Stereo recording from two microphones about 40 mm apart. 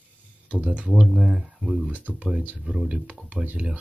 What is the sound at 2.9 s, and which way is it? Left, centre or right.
Speech, right.